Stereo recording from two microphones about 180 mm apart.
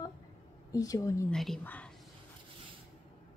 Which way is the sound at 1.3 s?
Centre (ahead or behind).